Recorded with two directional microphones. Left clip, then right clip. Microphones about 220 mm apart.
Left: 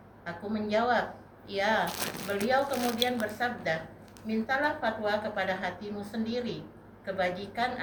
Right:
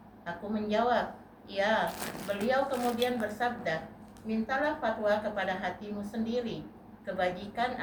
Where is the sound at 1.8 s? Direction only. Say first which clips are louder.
Left 1 dB; 40° left (ahead or behind).